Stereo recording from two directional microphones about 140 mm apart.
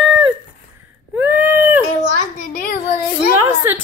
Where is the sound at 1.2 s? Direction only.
15° right (ahead or behind).